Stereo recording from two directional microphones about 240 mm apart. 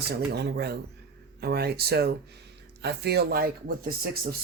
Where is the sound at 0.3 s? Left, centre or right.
Right.